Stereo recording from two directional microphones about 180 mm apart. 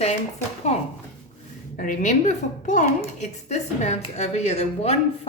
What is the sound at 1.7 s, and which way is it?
A woman's voice, 45° left (ahead or behind).